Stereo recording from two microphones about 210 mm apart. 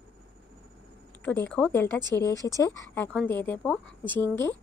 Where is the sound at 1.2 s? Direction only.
10° left (ahead or behind).